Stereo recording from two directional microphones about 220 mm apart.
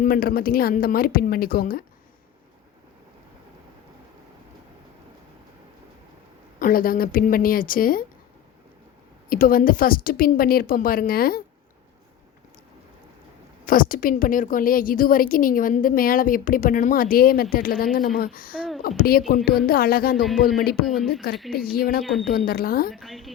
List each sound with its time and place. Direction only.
0.0 s a woman's voice: 40° left (ahead or behind)
6.6 s a woman's voice: 40° left (ahead or behind)
9.3 s a woman's voice: 40° left (ahead or behind)
13.7 s a woman's voice: 40° left (ahead or behind)
20.8 s a woman's voice: centre (ahead or behind)
21.5 s speech: 45° left (ahead or behind)
22.9 s a woman's voice: centre (ahead or behind)